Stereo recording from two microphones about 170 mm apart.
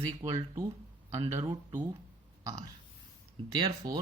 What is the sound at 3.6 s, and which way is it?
Speech, 25° right (ahead or behind).